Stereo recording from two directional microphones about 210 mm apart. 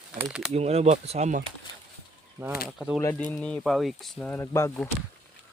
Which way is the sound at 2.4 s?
15° right (ahead or behind).